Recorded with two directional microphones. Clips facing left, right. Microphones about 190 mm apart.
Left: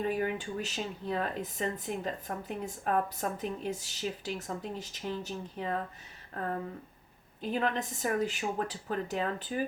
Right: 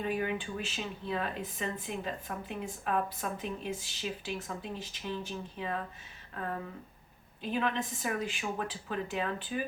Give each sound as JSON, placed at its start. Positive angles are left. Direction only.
{"t": 0.0, "sound": "speech", "side_deg": 40}